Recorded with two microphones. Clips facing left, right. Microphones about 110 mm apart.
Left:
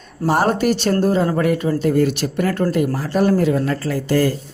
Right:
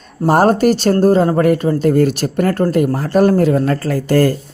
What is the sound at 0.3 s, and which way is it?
A woman's voice, 45° right (ahead or behind).